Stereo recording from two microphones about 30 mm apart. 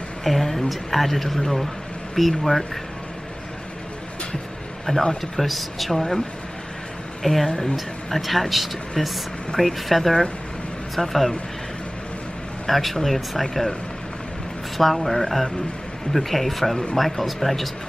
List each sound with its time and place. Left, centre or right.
0.2 s speech: centre
4.9 s speech: left
5.2 s speech: centre
5.9 s speech: centre
7.4 s speech: left
7.7 s speech: centre
9.0 s speech: centre
12.6 s speech: centre
14.8 s speech: centre